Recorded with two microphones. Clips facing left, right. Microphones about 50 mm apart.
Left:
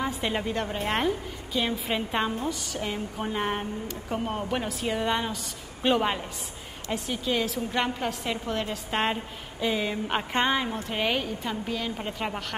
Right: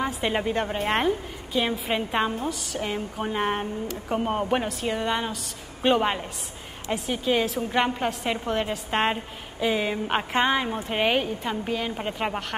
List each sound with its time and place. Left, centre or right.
0.0 s a woman's voice: centre
4.1 s speech: right
4.6 s a woman's voice: centre